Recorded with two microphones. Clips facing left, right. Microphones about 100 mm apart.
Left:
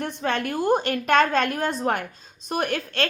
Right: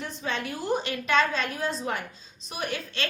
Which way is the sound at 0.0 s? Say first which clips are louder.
Left 6 dB; 60° left (ahead or behind).